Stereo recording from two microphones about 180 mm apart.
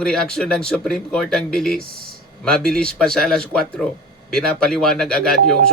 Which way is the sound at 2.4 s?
5° left (ahead or behind).